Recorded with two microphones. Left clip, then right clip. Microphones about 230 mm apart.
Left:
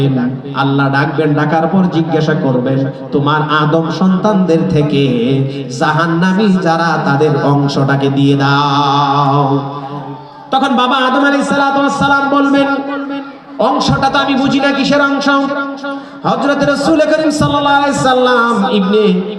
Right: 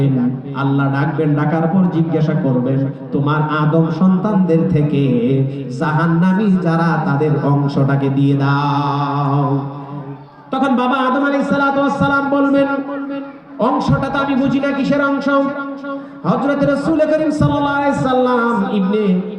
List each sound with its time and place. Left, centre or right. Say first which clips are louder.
0.5 s a man's voice: left 7 dB; centre
10.5 s a man's voice: left 5 dB; centre